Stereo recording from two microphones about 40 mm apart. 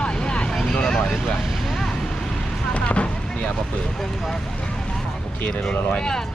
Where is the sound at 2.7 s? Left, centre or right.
Left.